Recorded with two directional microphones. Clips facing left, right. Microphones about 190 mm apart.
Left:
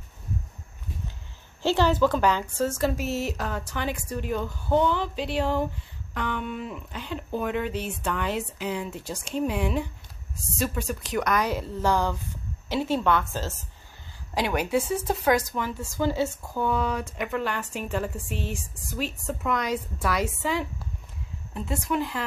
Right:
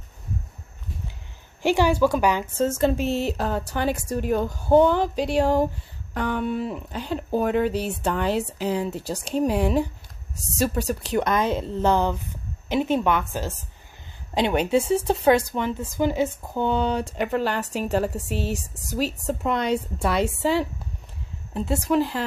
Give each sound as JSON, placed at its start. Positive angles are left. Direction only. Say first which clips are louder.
{"t": 1.6, "sound": "a woman's voice", "louder": "right 2 dB", "side_deg": -15}
{"t": 2.5, "sound": "a woman's voice", "louder": "right 4 dB", "side_deg": -25}
{"t": 21.8, "sound": "speech", "louder": "right 6 dB", "side_deg": -30}